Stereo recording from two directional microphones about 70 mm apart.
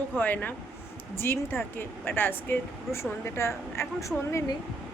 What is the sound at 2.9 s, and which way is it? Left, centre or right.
A woman's voice, left.